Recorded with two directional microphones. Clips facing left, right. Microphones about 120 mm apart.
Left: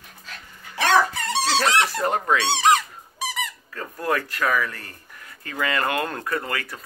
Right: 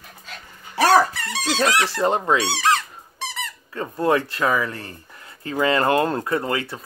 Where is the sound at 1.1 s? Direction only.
25° left (ahead or behind).